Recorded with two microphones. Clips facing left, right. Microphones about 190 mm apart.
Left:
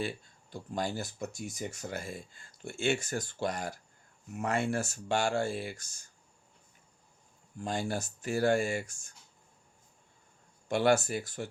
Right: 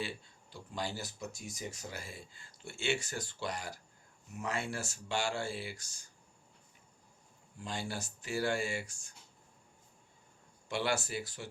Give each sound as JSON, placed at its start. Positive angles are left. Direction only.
{"t": 0.5, "sound": "speech", "side_deg": 50}
{"t": 7.6, "sound": "speech", "side_deg": 50}
{"t": 10.7, "sound": "speech", "side_deg": 50}